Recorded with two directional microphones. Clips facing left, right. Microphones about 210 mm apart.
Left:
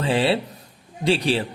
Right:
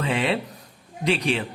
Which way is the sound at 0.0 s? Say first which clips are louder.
Left 3 dB; 30° left (ahead or behind).